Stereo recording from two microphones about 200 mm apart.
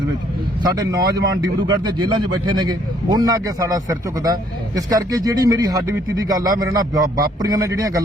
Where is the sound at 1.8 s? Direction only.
20° right (ahead or behind).